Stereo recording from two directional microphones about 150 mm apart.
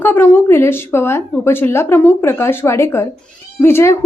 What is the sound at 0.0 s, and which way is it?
A woman's voice, 15° left (ahead or behind).